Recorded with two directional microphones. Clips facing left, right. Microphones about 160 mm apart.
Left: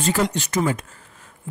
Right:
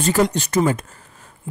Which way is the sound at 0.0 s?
40° right (ahead or behind).